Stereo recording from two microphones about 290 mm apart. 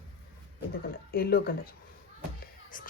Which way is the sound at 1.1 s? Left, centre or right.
Left.